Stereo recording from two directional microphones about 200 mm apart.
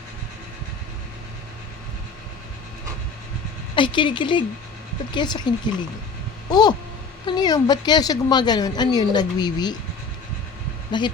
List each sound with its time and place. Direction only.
3.8 s speech: 25° left (ahead or behind)
10.9 s speech: 20° left (ahead or behind)